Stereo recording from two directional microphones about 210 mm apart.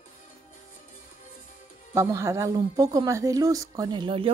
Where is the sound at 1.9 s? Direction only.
15° right (ahead or behind).